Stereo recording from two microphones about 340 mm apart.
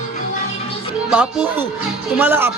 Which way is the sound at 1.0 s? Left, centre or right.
Centre.